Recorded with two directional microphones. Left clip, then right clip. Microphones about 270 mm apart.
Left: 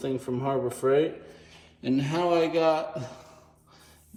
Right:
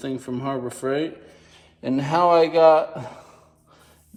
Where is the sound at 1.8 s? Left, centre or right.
Centre.